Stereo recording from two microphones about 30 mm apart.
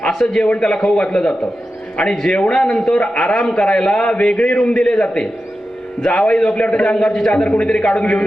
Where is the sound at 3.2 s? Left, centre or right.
Left.